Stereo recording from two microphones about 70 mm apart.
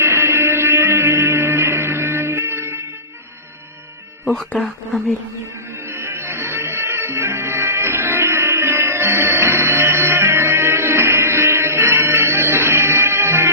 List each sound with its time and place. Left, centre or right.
0.0 s music: right
5.9 s music: right